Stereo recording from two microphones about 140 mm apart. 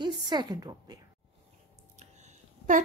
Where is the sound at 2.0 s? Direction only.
60° right (ahead or behind).